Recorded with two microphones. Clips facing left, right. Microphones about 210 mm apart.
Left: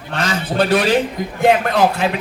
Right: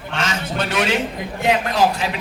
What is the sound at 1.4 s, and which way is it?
Speech, 55° left (ahead or behind).